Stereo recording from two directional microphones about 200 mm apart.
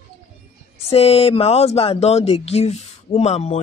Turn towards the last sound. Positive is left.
turn(degrees=35)  # may be behind; listen again after turning